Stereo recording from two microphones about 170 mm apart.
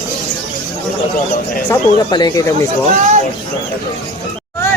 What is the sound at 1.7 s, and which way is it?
Speech, 25° left (ahead or behind).